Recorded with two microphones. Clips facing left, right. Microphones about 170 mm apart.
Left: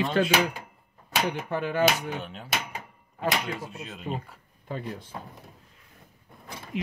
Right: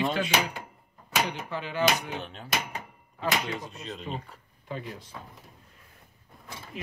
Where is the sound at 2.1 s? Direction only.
5° left (ahead or behind).